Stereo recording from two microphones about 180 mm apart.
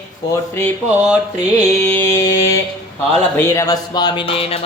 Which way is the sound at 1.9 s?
15° left (ahead or behind).